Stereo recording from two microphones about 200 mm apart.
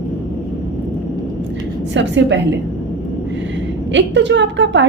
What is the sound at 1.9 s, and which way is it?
Speech, 65° right (ahead or behind).